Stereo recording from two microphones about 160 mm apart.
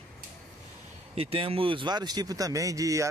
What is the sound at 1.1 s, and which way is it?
Speech, 35° right (ahead or behind).